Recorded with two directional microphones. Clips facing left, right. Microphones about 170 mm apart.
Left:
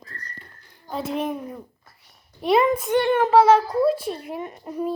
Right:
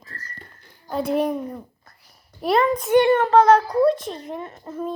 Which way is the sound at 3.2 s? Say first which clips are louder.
Even; 5° left (ahead or behind).